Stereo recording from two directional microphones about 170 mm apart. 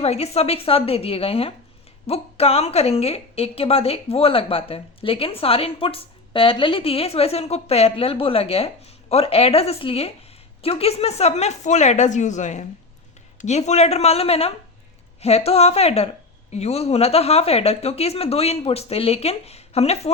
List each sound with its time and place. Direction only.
0.0 s a woman's voice: 35° left (ahead or behind)